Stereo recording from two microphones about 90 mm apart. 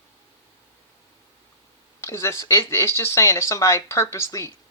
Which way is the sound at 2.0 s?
30° left (ahead or behind).